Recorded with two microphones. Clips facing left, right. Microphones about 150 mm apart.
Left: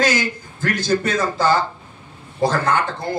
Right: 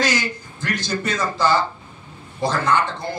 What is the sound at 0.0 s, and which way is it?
A man's voice, 50° left (ahead or behind).